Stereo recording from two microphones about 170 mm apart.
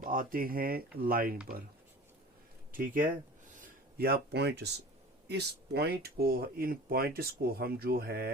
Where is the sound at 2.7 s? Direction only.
55° right (ahead or behind).